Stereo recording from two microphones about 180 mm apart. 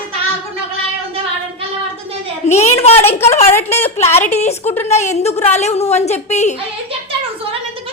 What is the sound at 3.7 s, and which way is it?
A woman's voice, 35° left (ahead or behind).